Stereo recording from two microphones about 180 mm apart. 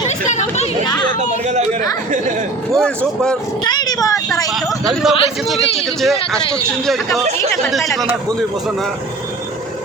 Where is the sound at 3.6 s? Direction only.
20° left (ahead or behind).